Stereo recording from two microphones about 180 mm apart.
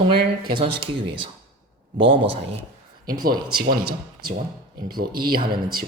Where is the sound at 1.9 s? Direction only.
30° right (ahead or behind).